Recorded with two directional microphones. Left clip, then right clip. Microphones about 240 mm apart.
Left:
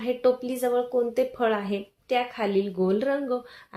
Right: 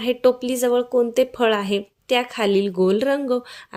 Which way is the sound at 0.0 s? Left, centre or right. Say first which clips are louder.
Right 5 dB; right.